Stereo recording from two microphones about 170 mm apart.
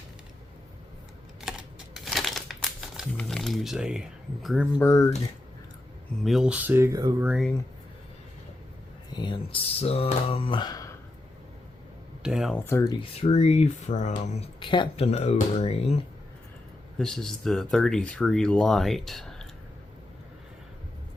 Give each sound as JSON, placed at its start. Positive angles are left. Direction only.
{"t": 1.4, "sound": "typing", "side_deg": -5}
{"t": 2.0, "sound": "crumpling", "side_deg": 0}
{"t": 4.8, "sound": "speech", "side_deg": 20}
{"t": 6.2, "sound": "speech", "side_deg": -5}
{"t": 9.1, "sound": "speech", "side_deg": 30}
{"t": 12.2, "sound": "speech", "side_deg": -5}
{"t": 12.5, "sound": "speech", "side_deg": 15}
{"t": 13.0, "sound": "speech", "side_deg": 35}
{"t": 17.0, "sound": "speech", "side_deg": 0}